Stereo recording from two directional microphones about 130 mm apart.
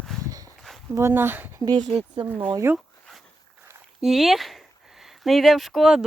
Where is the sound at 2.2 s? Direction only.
50° right (ahead or behind).